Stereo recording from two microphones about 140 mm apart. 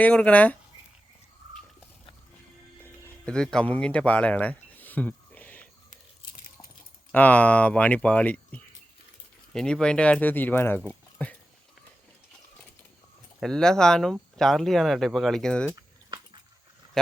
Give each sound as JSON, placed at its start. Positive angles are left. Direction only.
{"t": 0.0, "sound": "speech", "side_deg": 10}
{"t": 3.2, "sound": "speech", "side_deg": 5}
{"t": 7.1, "sound": "speech", "side_deg": 10}
{"t": 13.4, "sound": "speech", "side_deg": 5}
{"t": 15.7, "sound": "boiling", "side_deg": -30}